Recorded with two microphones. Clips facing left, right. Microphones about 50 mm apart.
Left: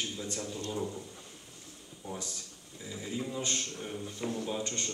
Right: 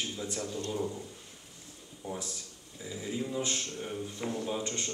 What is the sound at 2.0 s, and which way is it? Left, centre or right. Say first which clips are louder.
Speech: right 2 dB; right.